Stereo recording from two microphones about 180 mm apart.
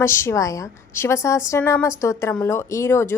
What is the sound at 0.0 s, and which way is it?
Speech, 15° left (ahead or behind).